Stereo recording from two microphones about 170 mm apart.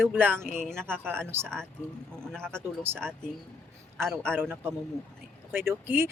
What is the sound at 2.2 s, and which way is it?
Speech, 5° left (ahead or behind).